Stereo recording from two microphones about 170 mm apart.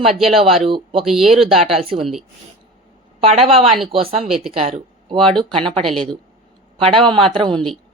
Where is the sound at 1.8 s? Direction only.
35° right (ahead or behind).